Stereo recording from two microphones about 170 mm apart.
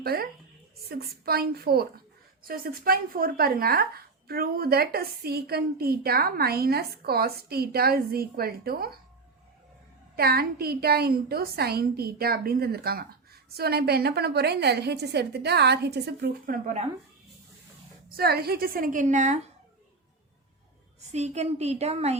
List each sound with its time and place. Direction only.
0.0 s a woman's voice: 65° right (ahead or behind)
10.2 s a woman's voice: 65° right (ahead or behind)
18.2 s speech: 65° right (ahead or behind); by 19.5 s 45° right (ahead or behind)
21.1 s a woman's voice: 40° right (ahead or behind)